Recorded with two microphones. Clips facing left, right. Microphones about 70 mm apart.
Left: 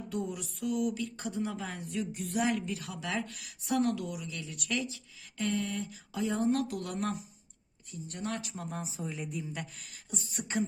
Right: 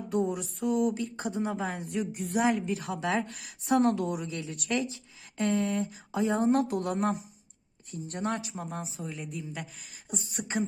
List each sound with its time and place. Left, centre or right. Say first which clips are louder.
0.1 s a woman's voice: right 8 dB; right
5.4 s a woman's voice: right 5 dB; right
8.6 s speech: right 1 dB; centre
10.1 s beatboxing: right 3 dB; centre